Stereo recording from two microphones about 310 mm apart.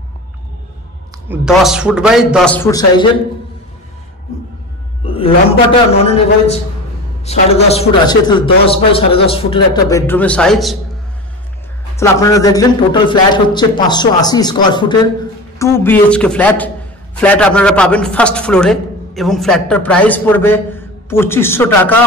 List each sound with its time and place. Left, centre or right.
1.3 s a man's voice: centre
5.1 s a man's voice: centre
12.0 s a man's voice: centre